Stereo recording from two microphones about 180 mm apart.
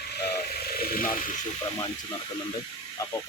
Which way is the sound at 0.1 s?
65° left (ahead or behind).